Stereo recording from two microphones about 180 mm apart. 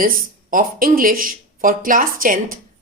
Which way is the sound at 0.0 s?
50° right (ahead or behind).